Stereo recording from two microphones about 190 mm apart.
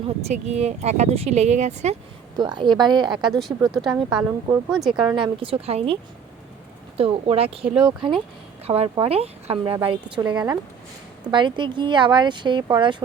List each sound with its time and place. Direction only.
0.3 s speech: 35° right (ahead or behind)
2.3 s a woman's voice: 25° right (ahead or behind)
3.7 s speech: centre (ahead or behind)
4.2 s speech: 15° right (ahead or behind)
4.7 s speech: centre (ahead or behind)
4.9 s a woman's voice: 25° right (ahead or behind)